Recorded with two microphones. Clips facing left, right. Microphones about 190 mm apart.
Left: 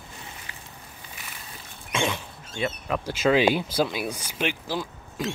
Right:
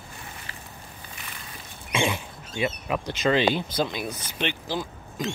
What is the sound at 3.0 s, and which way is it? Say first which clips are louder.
Speech: left 2 dB; 5° left (ahead or behind).